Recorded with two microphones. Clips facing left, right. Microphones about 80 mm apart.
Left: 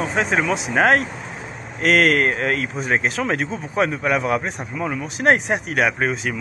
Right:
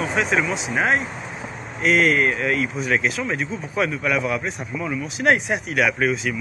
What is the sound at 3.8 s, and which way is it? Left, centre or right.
Speech, left.